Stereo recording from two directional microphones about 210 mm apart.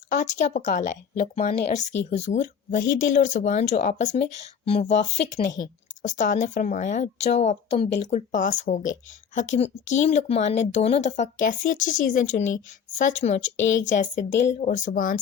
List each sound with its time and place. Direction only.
0.1 s speech: 35° left (ahead or behind)